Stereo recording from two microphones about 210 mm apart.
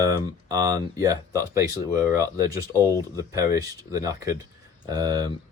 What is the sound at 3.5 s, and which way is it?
Speech, 15° right (ahead or behind).